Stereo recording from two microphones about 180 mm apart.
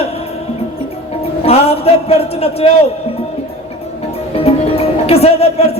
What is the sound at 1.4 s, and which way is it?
A man's voice, 35° left (ahead or behind).